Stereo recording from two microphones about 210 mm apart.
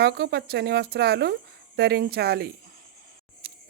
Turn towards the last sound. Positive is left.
turn(degrees=-45)  # may be behind; listen again after turning